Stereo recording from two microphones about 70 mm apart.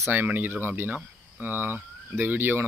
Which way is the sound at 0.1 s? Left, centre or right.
Right.